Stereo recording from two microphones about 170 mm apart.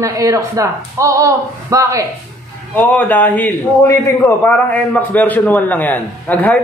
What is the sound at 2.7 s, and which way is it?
A man's voice, 10° left (ahead or behind).